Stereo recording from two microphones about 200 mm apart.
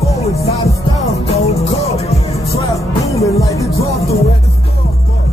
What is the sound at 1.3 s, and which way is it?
Music, 30° left (ahead or behind).